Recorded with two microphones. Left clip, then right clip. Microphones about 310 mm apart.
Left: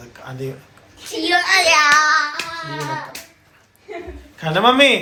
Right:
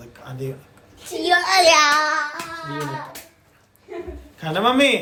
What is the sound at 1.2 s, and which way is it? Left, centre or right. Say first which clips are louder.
Speech: even; right.